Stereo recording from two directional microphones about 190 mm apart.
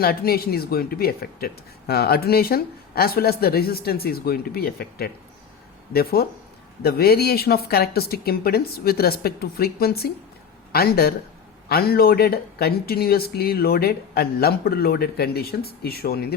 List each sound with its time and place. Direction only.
0.0 s speech: 55° left (ahead or behind)